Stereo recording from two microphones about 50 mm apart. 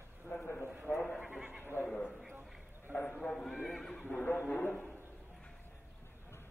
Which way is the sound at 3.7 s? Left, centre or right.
Centre.